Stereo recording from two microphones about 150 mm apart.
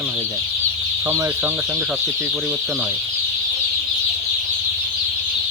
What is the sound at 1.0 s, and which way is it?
Speech, 20° right (ahead or behind).